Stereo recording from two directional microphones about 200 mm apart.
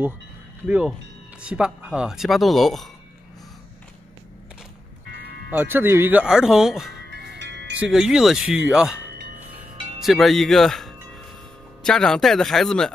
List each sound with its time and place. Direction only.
0.7 s speech: 5° right (ahead or behind)
5.1 s music: 55° right (ahead or behind)
5.5 s speech: 10° right (ahead or behind)
7.1 s music: 55° right (ahead or behind)
7.7 s speech: 5° right (ahead or behind)